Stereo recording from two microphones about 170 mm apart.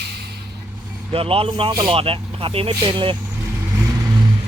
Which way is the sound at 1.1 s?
35° right (ahead or behind).